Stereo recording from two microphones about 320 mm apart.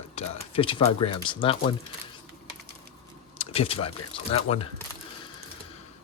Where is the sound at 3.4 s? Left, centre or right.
Centre.